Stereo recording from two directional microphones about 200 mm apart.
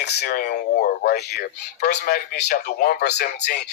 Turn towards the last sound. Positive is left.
turn(degrees=55)  # may be behind; listen again after turning